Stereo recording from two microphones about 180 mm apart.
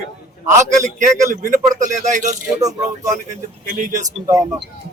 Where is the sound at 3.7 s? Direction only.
45° right (ahead or behind).